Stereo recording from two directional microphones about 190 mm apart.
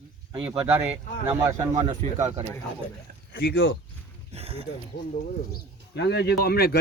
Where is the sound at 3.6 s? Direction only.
90° left.